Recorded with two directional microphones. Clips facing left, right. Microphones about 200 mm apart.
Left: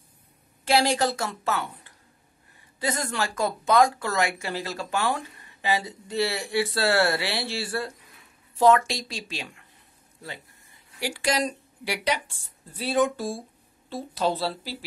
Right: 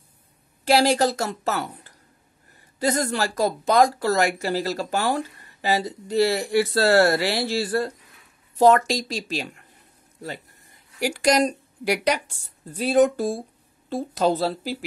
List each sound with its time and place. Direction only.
0.7 s speech: 40° right (ahead or behind)
11.0 s speech: 45° right (ahead or behind)